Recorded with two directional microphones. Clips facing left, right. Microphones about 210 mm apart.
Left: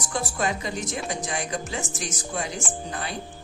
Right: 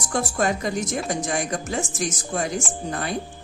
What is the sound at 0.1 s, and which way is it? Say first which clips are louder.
A woman's voice: right 4 dB; 45° right (ahead or behind).